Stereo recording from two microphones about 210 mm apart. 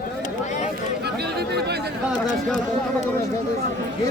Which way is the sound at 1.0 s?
50° right (ahead or behind).